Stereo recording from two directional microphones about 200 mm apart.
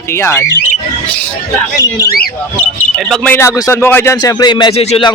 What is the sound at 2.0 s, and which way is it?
Speech, 50° left (ahead or behind).